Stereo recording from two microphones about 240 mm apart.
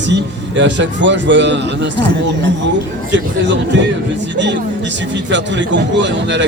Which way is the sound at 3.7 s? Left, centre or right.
Right.